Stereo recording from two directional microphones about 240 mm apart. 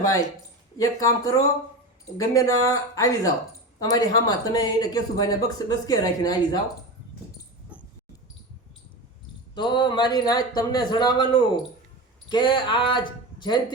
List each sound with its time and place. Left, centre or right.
0.8 s speech: centre
9.6 s speech: centre